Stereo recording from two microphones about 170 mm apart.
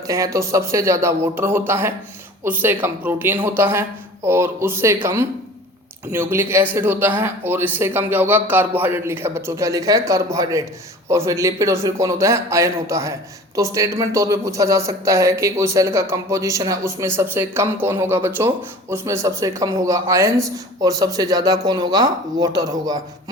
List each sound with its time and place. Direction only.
0.1 s speech: 20° right (ahead or behind)